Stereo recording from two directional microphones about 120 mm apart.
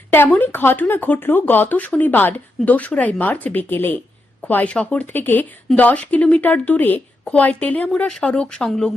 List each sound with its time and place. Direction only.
0.1 s speech: 15° left (ahead or behind)